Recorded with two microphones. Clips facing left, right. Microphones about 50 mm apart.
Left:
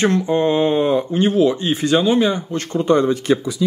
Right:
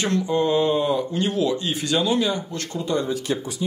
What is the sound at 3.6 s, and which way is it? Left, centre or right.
Speech, left.